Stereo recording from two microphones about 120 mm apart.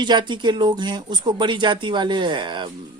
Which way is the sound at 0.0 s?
40° right (ahead or behind).